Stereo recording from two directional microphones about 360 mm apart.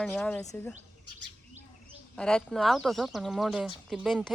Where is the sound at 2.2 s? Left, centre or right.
Centre.